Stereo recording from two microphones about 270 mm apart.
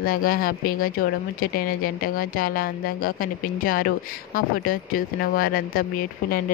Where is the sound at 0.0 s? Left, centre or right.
Left.